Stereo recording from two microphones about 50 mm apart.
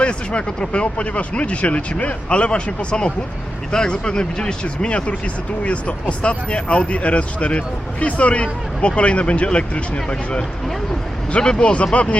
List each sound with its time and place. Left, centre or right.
0.0 s speech: left